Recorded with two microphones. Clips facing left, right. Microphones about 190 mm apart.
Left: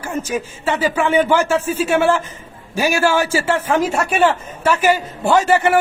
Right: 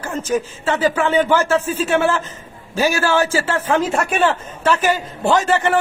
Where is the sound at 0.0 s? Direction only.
10° left (ahead or behind).